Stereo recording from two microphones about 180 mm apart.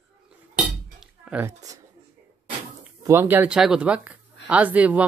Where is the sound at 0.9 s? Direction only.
5° right (ahead or behind).